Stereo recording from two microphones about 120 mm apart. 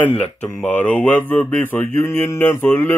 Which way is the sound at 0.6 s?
15° left (ahead or behind).